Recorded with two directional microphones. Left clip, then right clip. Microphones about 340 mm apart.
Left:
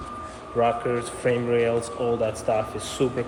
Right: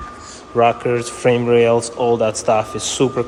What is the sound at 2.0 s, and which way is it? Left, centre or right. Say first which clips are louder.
Speech: right 8 dB; right.